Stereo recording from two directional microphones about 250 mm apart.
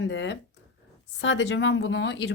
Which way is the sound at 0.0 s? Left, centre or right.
Left.